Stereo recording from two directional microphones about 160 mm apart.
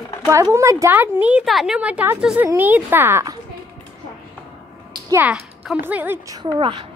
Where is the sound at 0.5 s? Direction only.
20° right (ahead or behind).